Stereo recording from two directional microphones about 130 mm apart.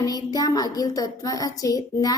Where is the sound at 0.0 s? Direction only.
30° left (ahead or behind).